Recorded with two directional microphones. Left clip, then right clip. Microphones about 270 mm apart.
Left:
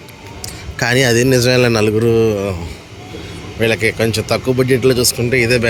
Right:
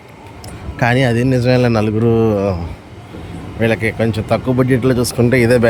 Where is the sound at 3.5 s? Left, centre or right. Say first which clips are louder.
Left 1 dB; centre.